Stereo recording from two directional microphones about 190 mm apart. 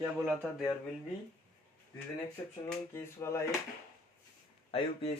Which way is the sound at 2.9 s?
15° left (ahead or behind).